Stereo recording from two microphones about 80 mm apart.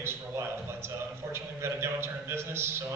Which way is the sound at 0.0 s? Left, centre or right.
Right.